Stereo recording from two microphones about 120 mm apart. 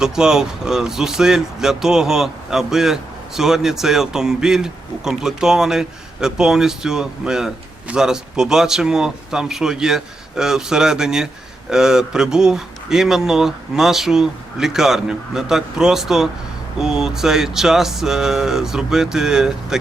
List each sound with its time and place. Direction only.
0.0 s speech: 5° right (ahead or behind)